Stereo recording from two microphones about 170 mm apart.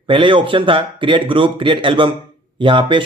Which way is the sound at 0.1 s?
30° right (ahead or behind).